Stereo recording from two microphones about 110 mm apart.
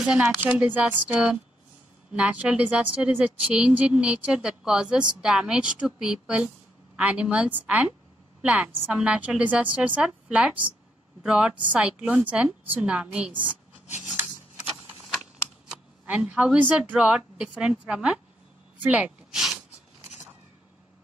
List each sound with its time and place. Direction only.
0.0 s speech: 5° right (ahead or behind)
0.4 s speech: 15° right (ahead or behind)
13.8 s a sound: 90° left
15.7 s speech: 10° right (ahead or behind)